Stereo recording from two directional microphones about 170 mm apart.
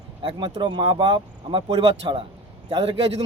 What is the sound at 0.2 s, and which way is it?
Speech, 30° right (ahead or behind).